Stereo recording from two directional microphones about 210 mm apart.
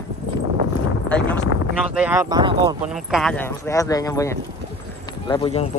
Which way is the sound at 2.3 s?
20° right (ahead or behind).